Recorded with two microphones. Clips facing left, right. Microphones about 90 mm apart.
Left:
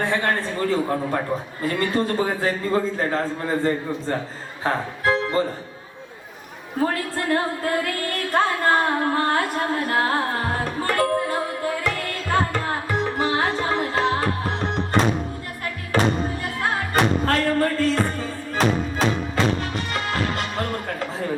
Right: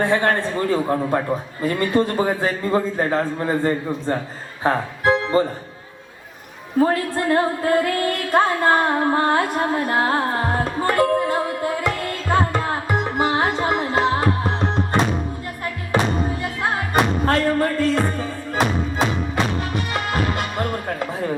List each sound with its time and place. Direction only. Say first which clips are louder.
0.0 s a man's voice: right 4 dB; 20° right (ahead or behind)
6.8 s music: right 2 dB; 25° right (ahead or behind)